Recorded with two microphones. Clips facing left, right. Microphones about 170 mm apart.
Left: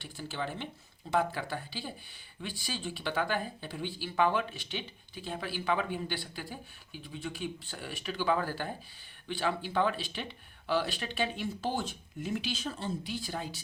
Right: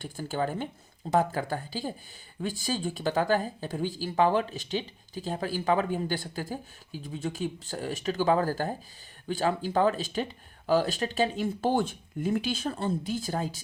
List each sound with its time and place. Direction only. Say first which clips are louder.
0.0 s speech: right 7 dB; 45° right (ahead or behind)